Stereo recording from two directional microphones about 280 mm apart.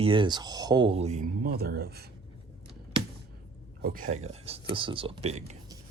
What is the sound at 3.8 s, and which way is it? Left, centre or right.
Speech, right.